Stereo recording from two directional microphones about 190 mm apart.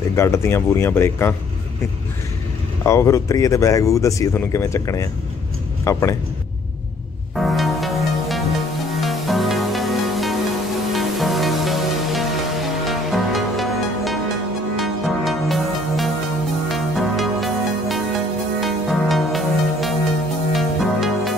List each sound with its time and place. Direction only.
0.1 s speech: 15° left (ahead or behind)
2.8 s speech: 15° left (ahead or behind)
7.3 s music: centre (ahead or behind)